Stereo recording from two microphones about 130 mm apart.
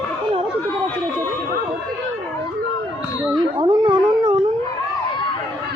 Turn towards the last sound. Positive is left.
turn(degrees=-35)  # may be behind; listen again after turning